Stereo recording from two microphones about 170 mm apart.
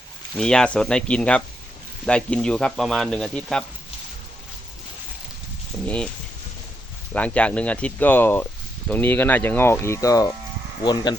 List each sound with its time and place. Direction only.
0.3 s speech: 5° left (ahead or behind)
5.8 s speech: 5° left (ahead or behind)
7.1 s speech: 5° left (ahead or behind); by 11.2 s 25° left (ahead or behind)